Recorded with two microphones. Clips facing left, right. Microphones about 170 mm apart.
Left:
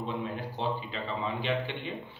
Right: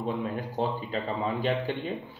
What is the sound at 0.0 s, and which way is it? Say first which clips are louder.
Speech: right 4 dB; 45° right (ahead or behind).